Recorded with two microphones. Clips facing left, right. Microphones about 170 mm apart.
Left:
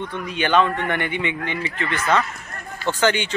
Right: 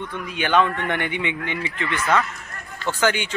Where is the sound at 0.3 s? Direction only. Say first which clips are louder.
Left 1 dB; 10° right (ahead or behind).